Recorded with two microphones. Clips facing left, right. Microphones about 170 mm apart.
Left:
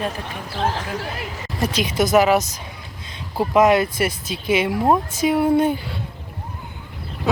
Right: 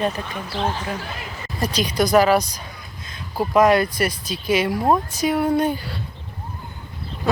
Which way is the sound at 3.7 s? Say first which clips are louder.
Even; 25° left (ahead or behind).